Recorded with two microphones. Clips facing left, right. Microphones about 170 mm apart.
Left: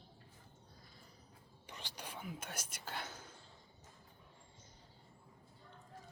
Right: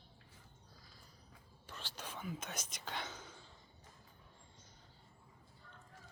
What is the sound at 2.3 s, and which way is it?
Speech, 10° left (ahead or behind).